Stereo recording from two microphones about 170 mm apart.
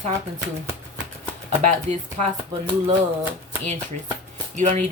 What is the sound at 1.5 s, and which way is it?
Speech, 45° right (ahead or behind).